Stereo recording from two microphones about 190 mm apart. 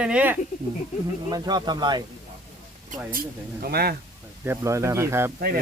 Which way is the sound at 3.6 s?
55° right (ahead or behind).